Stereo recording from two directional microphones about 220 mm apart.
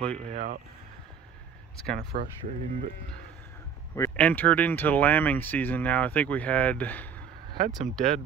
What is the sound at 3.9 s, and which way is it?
Speech, 10° left (ahead or behind).